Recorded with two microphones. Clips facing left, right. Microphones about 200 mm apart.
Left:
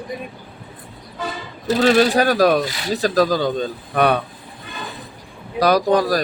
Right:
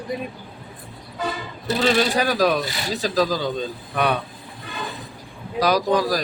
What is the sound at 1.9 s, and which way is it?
Speech, 50° left (ahead or behind).